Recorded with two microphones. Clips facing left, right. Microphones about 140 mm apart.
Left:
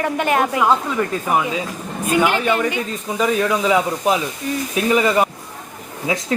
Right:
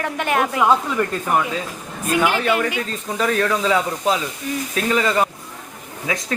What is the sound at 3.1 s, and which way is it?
Speech, 10° left (ahead or behind).